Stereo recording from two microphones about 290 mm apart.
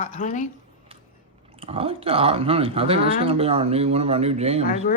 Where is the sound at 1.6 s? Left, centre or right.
Centre.